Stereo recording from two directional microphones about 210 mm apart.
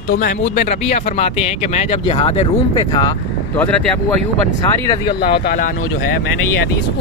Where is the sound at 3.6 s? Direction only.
5° left (ahead or behind).